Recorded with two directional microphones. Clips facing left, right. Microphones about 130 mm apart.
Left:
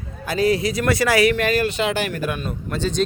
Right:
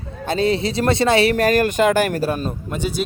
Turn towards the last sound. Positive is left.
turn(degrees=-10)  # may be behind; listen again after turning